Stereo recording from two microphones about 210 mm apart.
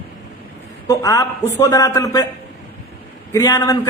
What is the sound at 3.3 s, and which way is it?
Speech, 15° left (ahead or behind).